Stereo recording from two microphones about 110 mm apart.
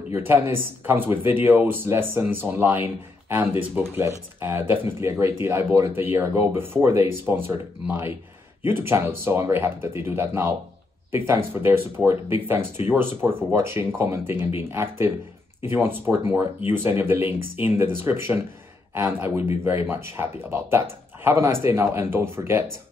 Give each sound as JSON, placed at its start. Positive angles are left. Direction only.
{"t": 0.1, "sound": "speech", "side_deg": -20}
{"t": 8.6, "sound": "speech", "side_deg": -20}